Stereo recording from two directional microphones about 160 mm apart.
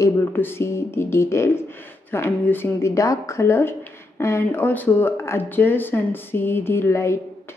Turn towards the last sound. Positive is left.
turn(degrees=15)  # may be behind; listen again after turning